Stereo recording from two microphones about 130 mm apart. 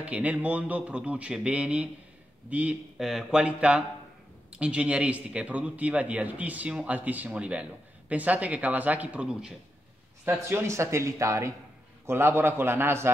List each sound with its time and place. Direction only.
0.0 s speech: 10° right (ahead or behind)
10.2 s speech: 15° right (ahead or behind)